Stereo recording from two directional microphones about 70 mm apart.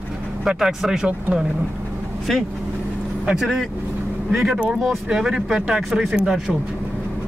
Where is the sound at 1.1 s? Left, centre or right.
Centre.